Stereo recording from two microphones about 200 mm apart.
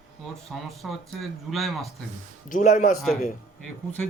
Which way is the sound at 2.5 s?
40° left (ahead or behind).